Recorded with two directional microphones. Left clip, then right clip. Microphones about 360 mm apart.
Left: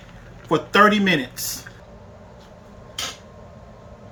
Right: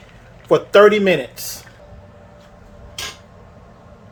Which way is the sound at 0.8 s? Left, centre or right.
Centre.